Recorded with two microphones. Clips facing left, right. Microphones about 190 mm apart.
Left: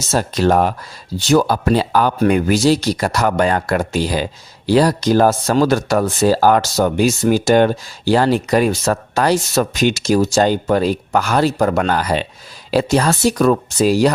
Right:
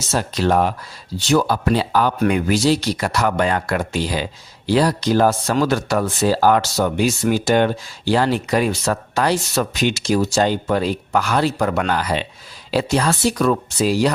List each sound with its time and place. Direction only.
0.1 s speech: 45° left (ahead or behind)